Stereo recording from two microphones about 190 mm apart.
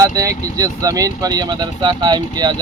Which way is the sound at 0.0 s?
15° right (ahead or behind).